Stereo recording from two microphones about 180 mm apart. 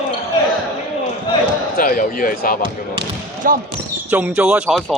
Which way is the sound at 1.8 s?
50° left (ahead or behind).